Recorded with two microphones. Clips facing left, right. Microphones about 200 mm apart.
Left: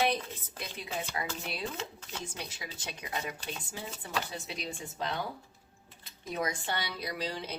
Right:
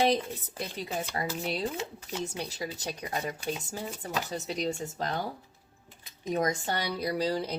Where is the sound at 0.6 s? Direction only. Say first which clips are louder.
Right 4 dB; 40° right (ahead or behind).